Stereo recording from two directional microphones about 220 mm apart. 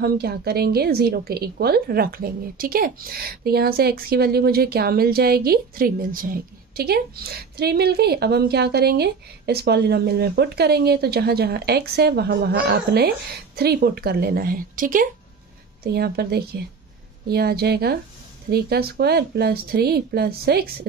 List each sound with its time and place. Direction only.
0.0 s a woman's voice: 45° right (ahead or behind)